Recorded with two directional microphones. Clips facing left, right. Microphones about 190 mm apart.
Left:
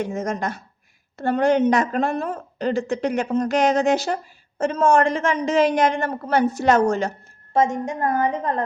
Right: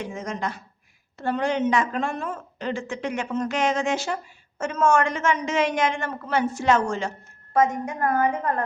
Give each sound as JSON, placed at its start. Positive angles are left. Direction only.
{"t": 0.0, "sound": "speech", "side_deg": 45}
{"t": 7.5, "sound": "a woman's voice", "side_deg": 25}